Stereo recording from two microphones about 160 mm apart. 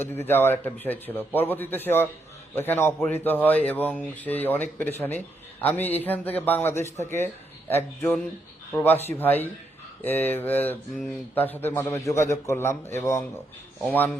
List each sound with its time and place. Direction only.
0.0 s speech: 15° left (ahead or behind)